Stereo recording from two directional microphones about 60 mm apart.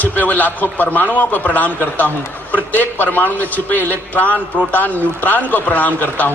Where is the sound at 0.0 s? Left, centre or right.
Left.